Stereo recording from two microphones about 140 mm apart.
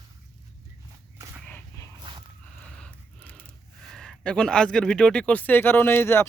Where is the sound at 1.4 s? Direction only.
10° left (ahead or behind).